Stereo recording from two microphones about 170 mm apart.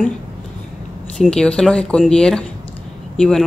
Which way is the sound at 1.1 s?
5° left (ahead or behind).